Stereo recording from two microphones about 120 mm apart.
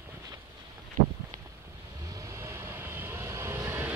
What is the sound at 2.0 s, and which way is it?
Vehicle, 25° right (ahead or behind).